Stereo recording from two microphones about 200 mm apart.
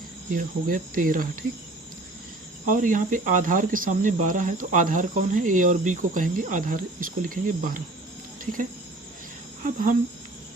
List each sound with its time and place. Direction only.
0.3 s cricket: 45° right (ahead or behind)
2.6 s speech: 40° right (ahead or behind)
9.6 s speech: 40° right (ahead or behind)